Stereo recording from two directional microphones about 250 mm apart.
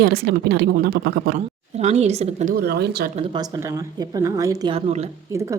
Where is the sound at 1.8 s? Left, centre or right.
Right.